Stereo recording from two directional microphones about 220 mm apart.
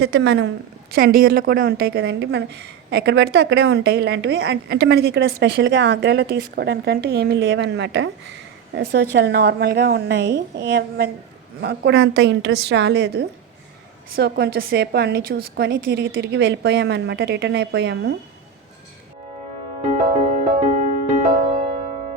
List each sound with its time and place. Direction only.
0.0 s a woman's voice: 50° right (ahead or behind)
19.9 s music: 30° right (ahead or behind)